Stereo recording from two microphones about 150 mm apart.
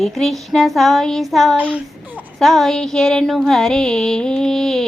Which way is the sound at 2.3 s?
Centre (ahead or behind).